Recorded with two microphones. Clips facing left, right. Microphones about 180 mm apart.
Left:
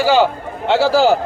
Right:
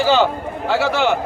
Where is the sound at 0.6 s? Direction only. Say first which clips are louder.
Left 5 dB; 30° left (ahead or behind).